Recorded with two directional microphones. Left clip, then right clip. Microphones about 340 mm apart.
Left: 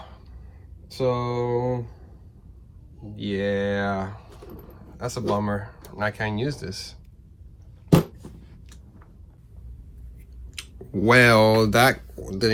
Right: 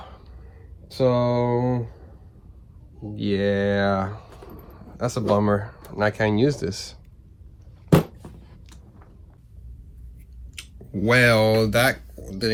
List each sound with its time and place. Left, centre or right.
0.9 s speech: right
3.2 s speech: right
10.5 s speech: centre